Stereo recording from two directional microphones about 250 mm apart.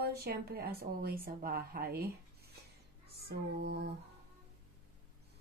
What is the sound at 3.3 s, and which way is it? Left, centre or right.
Speech, right.